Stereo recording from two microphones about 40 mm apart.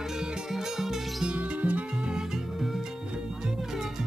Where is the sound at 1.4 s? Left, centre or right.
Right.